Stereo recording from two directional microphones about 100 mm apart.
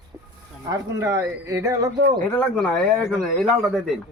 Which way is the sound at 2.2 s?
15° left (ahead or behind).